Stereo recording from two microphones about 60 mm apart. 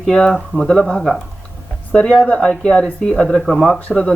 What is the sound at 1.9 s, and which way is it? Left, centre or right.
Speech, centre.